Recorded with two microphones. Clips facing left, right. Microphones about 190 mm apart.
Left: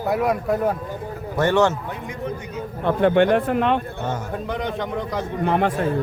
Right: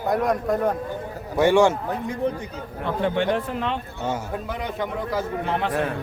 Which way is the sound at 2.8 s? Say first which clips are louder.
Left 6 dB; 60° left (ahead or behind).